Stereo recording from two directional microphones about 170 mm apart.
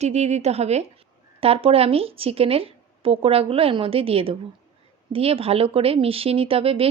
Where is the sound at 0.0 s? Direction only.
40° right (ahead or behind).